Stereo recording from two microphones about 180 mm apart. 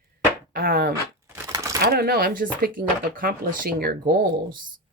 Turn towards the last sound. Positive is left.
turn(degrees=-55)  # may be behind; listen again after turning